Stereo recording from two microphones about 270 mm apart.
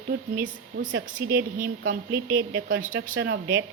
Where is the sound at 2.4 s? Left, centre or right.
Right.